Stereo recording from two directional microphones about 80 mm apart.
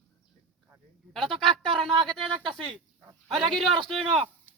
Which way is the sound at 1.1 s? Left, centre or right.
Centre.